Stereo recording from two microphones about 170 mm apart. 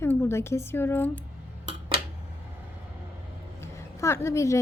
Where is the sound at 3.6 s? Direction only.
15° left (ahead or behind).